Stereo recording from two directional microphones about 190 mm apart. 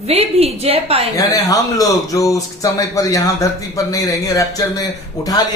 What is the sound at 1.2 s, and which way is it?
A man's voice, 20° left (ahead or behind).